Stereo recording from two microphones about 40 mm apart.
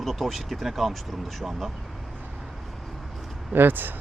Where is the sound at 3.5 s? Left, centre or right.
Right.